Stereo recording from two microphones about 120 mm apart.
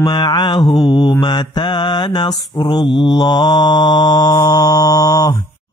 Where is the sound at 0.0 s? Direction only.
35° left (ahead or behind).